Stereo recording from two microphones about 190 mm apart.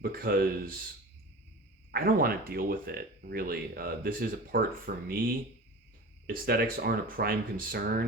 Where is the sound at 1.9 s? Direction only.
50° right (ahead or behind).